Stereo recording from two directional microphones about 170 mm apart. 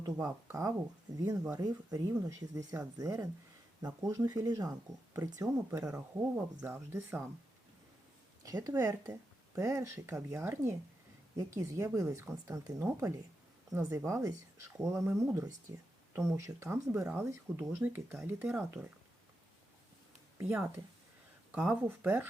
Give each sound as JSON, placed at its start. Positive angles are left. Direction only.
{"t": 0.0, "sound": "speech", "side_deg": -20}
{"t": 8.4, "sound": "speech", "side_deg": -20}
{"t": 20.4, "sound": "speech", "side_deg": -10}